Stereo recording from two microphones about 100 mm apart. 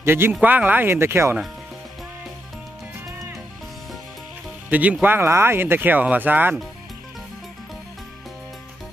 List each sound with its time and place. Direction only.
0.0 s speech: 25° right (ahead or behind)
4.6 s speech: 15° right (ahead or behind)